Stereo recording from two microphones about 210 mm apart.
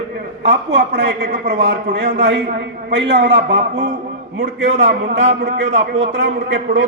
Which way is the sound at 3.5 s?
30° right (ahead or behind).